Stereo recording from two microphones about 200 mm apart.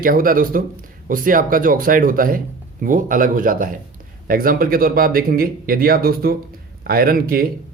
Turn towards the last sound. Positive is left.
turn(degrees=-45)  # may be behind; listen again after turning